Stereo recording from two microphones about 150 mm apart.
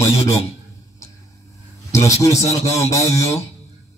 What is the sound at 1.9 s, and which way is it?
A man's voice, 20° left (ahead or behind).